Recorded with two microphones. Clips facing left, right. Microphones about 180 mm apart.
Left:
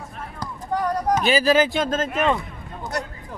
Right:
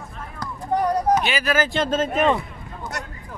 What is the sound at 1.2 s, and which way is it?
Speech, 30° left (ahead or behind).